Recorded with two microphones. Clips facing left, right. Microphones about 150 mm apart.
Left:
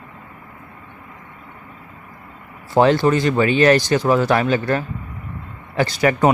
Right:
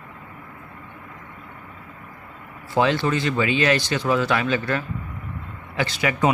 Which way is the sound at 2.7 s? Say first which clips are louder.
Left 6 dB; 40° left (ahead or behind).